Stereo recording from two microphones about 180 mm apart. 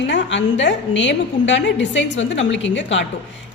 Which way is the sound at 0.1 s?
90° left.